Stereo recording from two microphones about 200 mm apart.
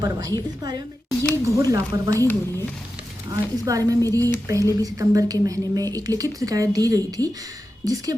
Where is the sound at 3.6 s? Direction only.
15° right (ahead or behind).